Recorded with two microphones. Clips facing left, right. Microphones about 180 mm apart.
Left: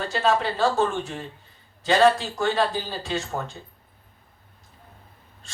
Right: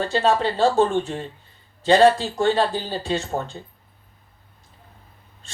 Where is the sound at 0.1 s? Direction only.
30° right (ahead or behind).